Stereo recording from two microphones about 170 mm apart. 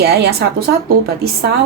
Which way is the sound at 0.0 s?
70° right (ahead or behind).